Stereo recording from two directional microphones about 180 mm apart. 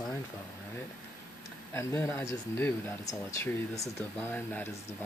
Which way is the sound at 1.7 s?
15° left (ahead or behind).